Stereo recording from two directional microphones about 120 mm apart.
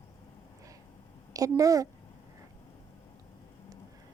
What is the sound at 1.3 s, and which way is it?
Speech, 30° right (ahead or behind).